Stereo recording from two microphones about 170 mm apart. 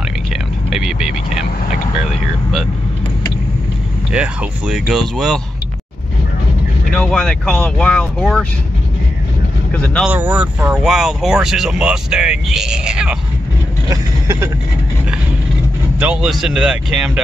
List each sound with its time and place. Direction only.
0.7 s vehicle: 5° right (ahead or behind)
4.1 s speech: 5° right (ahead or behind)
6.9 s speech: 5° left (ahead or behind)
9.7 s speech: 5° left (ahead or behind)
10.0 s speech: 10° right (ahead or behind)
13.8 s speech: 15° right (ahead or behind)
16.0 s speech: 5° right (ahead or behind)